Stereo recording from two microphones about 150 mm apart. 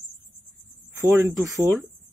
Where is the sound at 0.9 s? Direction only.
15° right (ahead or behind).